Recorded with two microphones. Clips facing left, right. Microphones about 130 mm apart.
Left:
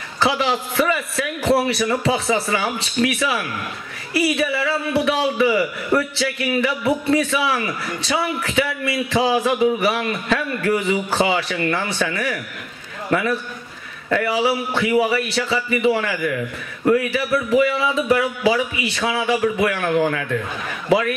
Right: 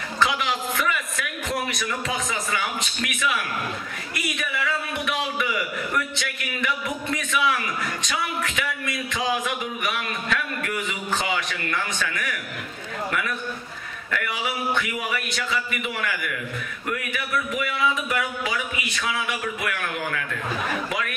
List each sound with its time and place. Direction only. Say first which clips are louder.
0.2 s a man's voice: left 5 dB; 30° left (ahead or behind)